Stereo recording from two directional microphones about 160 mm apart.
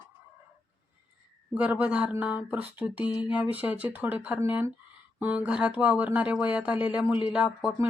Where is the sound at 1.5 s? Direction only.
10° right (ahead or behind).